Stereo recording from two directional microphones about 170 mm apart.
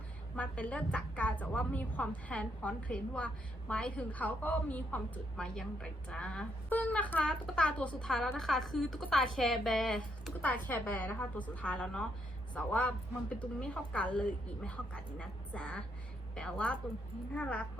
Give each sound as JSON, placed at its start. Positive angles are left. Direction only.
{"t": 0.3, "sound": "a woman's voice", "side_deg": 10}